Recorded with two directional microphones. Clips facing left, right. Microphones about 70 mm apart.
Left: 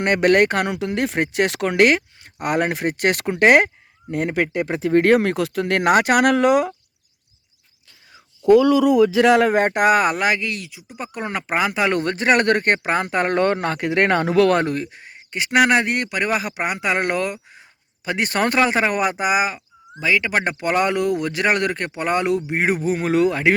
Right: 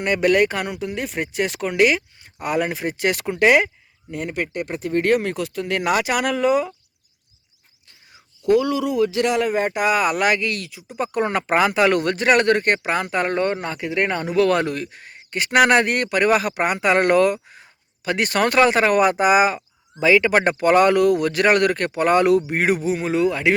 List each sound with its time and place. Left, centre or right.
0.0 s speech: left
0.9 s speech: left
4.1 s speech: left
5.9 s speech: left
9.3 s speech: left
10.1 s speech: left; by 11.7 s centre
11.7 s speech: centre
11.9 s speech: left
12.5 s speech: left
13.3 s speech: left
14.5 s speech: left
14.9 s speech: centre; by 18.6 s left
18.9 s speech: centre
22.6 s speech: left